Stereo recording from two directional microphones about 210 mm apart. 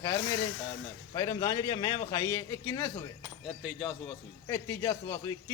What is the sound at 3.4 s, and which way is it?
Speech, centre (ahead or behind).